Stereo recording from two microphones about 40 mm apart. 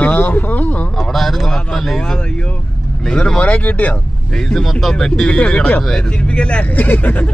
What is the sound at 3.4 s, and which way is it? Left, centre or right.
Speech, left.